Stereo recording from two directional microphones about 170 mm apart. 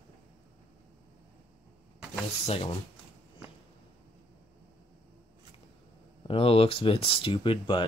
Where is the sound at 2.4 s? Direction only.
35° left (ahead or behind).